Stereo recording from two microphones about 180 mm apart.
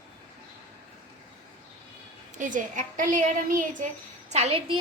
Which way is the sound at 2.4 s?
45° right (ahead or behind).